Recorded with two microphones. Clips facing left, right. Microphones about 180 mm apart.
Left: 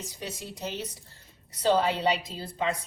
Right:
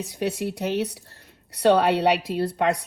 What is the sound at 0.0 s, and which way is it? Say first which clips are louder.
Speech: right 12 dB; 65° right (ahead or behind).